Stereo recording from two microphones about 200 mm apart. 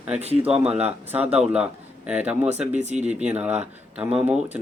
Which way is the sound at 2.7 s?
35° right (ahead or behind).